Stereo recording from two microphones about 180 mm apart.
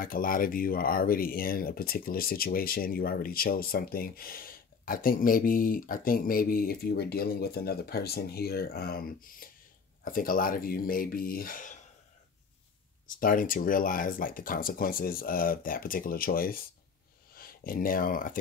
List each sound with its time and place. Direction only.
0.0 s speech: 50° left (ahead or behind)
13.0 s speech: 50° left (ahead or behind)